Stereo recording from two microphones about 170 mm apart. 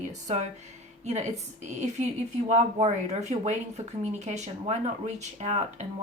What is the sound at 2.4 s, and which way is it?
Speech, 40° right (ahead or behind).